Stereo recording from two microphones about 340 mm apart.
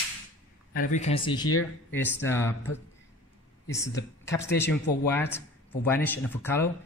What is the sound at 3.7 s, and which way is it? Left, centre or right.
A man's voice, centre.